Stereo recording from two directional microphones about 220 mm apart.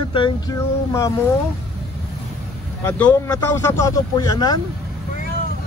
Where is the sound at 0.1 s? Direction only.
20° left (ahead or behind).